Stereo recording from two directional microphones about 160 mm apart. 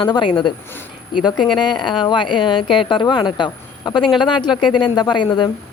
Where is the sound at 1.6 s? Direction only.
30° left (ahead or behind).